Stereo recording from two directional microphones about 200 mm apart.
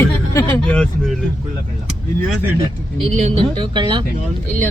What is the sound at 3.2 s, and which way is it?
Speech, 30° right (ahead or behind).